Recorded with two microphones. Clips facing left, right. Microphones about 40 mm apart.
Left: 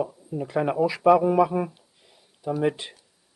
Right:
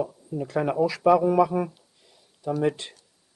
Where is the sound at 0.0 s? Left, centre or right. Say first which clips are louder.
Even; centre.